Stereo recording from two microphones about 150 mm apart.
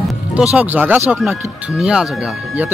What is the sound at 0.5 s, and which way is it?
Speech, 10° right (ahead or behind).